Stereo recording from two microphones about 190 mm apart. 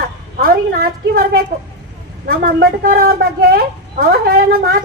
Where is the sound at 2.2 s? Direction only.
55° right (ahead or behind).